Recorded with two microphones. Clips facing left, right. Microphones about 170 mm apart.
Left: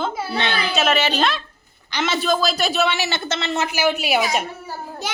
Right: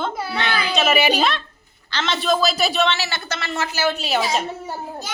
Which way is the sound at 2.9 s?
20° left (ahead or behind).